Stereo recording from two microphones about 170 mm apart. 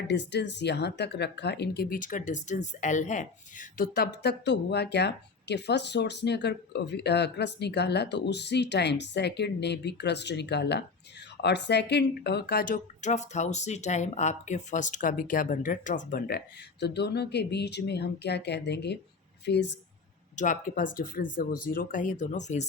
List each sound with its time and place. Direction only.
0.1 s speech: 90° left; by 3.8 s 50° left (ahead or behind)
3.9 s a woman's voice: 75° left (ahead or behind)
16.8 s a woman's voice: 85° left
20.3 s speech: 50° left (ahead or behind)